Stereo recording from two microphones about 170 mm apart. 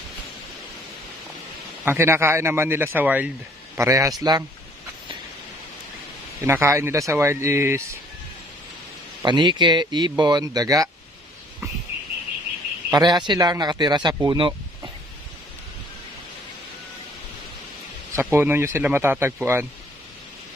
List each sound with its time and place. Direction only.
1.9 s speech: 15° right (ahead or behind)
6.4 s speech: 15° right (ahead or behind)
9.2 s speech: 25° right (ahead or behind)
12.9 s speech: 25° right (ahead or behind)
18.1 s speech: 15° right (ahead or behind)